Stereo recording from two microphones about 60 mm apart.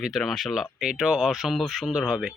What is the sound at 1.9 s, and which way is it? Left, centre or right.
Speech, centre.